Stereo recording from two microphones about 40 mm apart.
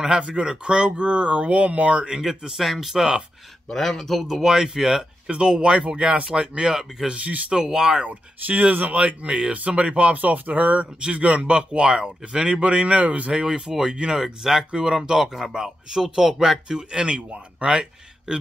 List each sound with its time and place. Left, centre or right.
0.2 s speech: right
2.2 s speech: centre
3.7 s speech: centre
4.3 s speech: centre
5.3 s speech: right
7.1 s speech: right
7.5 s speech: centre
8.0 s speech: right
13.3 s speech: centre